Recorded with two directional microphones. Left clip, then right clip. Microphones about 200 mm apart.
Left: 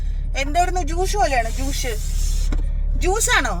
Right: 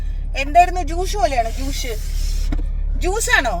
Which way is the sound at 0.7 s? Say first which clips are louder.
Even; 20° left (ahead or behind).